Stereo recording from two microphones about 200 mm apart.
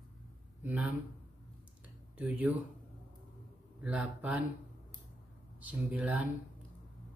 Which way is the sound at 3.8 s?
5° right (ahead or behind).